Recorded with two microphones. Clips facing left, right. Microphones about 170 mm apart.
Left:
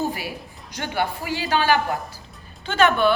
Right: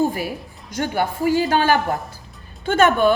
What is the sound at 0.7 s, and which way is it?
A woman's voice, 45° right (ahead or behind).